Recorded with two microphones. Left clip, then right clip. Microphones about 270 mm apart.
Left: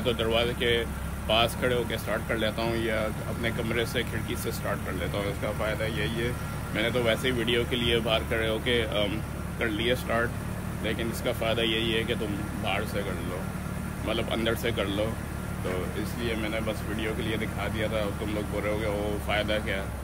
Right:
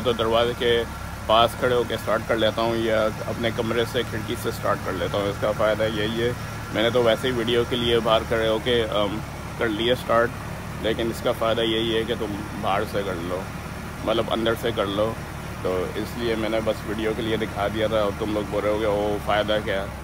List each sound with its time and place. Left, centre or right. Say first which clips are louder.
0.0 s speech: right 5 dB; centre
14.0 s speech: right 6 dB; centre
16.2 s speech: right 7 dB; centre